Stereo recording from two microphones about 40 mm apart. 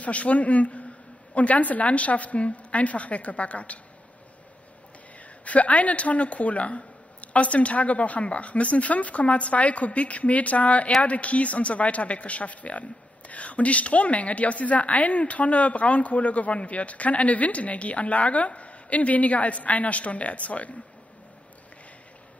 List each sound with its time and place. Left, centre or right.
0.0 s a woman's voice: left
5.4 s a woman's voice: left